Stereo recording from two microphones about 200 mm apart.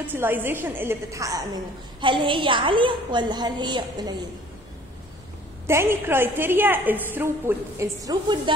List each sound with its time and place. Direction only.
0.0 s a woman's voice: 10° right (ahead or behind)
5.7 s a woman's voice: 10° right (ahead or behind)